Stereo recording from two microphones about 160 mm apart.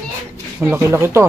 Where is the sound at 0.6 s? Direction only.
15° right (ahead or behind).